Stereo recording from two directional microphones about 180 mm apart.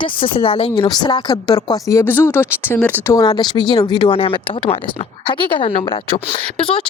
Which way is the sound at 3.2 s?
25° left (ahead or behind).